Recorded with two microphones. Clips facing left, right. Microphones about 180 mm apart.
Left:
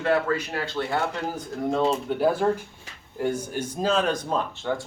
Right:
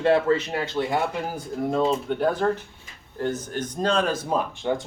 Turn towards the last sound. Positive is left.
turn(degrees=-15)  # may be behind; listen again after turning